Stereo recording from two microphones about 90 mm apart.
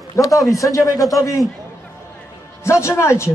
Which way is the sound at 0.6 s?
40° left (ahead or behind).